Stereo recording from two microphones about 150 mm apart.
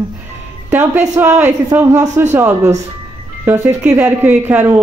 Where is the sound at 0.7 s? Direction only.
15° right (ahead or behind).